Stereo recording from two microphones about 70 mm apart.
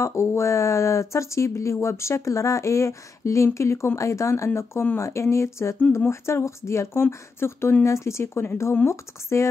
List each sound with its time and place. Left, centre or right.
0.0 s speech: left